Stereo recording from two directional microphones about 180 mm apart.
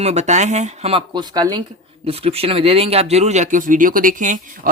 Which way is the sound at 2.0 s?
30° right (ahead or behind).